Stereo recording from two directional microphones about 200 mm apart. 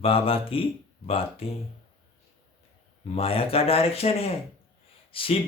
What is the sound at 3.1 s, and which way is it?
Speech, 30° left (ahead or behind).